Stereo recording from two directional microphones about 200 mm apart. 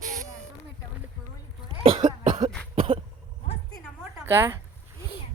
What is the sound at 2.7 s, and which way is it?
Throat clearing, 25° right (ahead or behind).